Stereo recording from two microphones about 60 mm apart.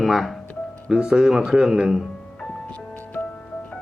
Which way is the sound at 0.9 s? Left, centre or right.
Centre.